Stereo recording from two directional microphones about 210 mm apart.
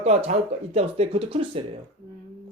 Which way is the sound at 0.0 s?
30° right (ahead or behind).